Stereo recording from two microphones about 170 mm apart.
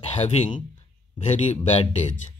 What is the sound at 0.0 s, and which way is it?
Speech, 40° left (ahead or behind).